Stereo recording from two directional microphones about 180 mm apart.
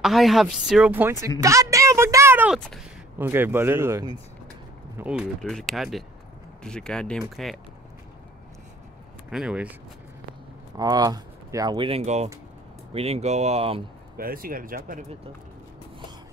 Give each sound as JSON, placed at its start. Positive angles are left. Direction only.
{"t": 0.0, "sound": "a woman's voice", "side_deg": 0}
{"t": 9.3, "sound": "speech", "side_deg": -5}
{"t": 10.8, "sound": "speech", "side_deg": -20}
{"t": 14.1, "sound": "speech", "side_deg": -55}